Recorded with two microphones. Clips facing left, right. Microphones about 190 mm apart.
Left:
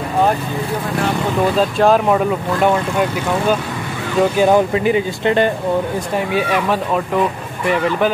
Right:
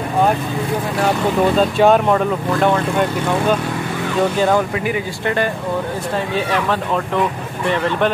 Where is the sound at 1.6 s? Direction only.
Centre (ahead or behind).